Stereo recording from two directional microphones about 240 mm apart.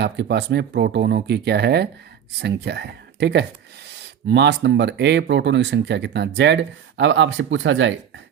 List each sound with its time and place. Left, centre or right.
0.0 s speech: right